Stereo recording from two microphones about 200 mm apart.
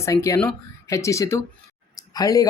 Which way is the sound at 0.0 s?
15° left (ahead or behind).